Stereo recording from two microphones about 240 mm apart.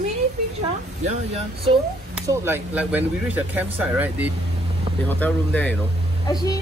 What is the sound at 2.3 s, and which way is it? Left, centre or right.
Speech, centre.